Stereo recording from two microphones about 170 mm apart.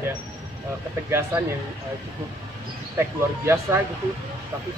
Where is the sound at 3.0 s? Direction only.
15° right (ahead or behind).